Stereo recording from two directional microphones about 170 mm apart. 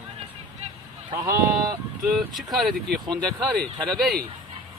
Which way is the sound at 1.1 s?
20° right (ahead or behind).